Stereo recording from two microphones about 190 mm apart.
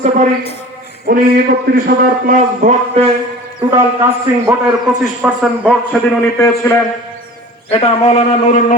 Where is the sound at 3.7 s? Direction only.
15° right (ahead or behind).